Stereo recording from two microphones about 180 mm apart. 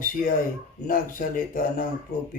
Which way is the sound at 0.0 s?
50° left (ahead or behind).